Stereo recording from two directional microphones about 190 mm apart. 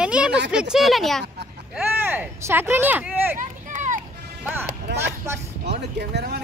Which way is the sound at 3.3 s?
40° right (ahead or behind).